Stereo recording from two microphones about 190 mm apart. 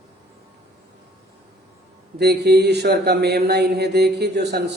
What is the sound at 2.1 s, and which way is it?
Speech, 60° right (ahead or behind).